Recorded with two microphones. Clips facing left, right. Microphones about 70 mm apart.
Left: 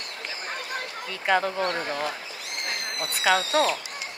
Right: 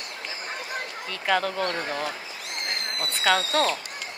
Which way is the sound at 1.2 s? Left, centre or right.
Centre.